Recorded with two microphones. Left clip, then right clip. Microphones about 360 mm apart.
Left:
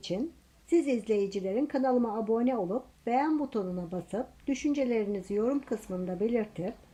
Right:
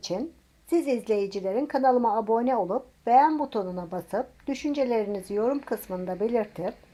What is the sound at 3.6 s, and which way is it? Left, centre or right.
A woman's voice, right.